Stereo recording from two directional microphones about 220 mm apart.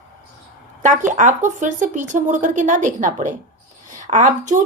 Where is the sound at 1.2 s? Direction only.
35° right (ahead or behind).